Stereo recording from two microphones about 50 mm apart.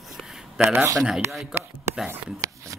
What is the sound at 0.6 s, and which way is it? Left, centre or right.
Speech, right.